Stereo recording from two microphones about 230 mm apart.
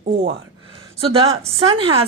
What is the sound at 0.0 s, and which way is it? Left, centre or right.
A woman's voice, right.